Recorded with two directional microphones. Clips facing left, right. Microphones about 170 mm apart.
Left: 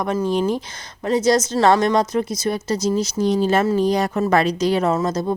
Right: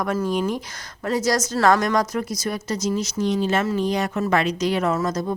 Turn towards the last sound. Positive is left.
turn(degrees=30)  # may be behind; listen again after turning